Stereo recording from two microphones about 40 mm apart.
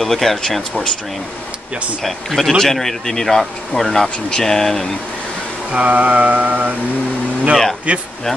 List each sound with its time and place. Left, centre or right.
0.0 s speech: centre
2.0 s speech: centre
5.7 s mantra: right
7.9 s mantra: right